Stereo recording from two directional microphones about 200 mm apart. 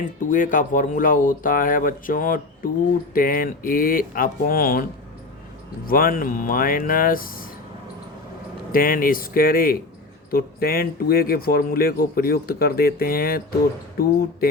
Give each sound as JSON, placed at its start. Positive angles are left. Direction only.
{"t": 0.2, "sound": "speech", "side_deg": 40}
{"t": 8.7, "sound": "speech", "side_deg": 45}